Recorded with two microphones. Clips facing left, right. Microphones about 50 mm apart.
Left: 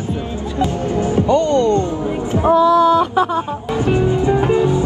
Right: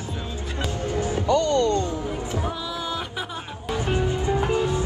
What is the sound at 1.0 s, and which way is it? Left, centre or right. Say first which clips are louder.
Speech: left 7 dB; left.